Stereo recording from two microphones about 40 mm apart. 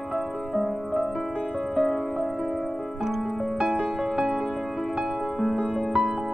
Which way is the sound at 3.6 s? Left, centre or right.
Centre.